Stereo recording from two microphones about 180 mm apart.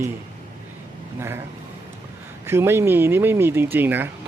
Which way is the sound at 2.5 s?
15° right (ahead or behind).